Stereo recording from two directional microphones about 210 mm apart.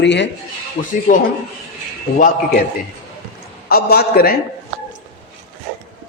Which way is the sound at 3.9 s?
50° left (ahead or behind).